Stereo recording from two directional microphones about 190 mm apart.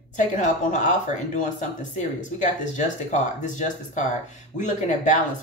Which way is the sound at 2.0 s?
40° left (ahead or behind).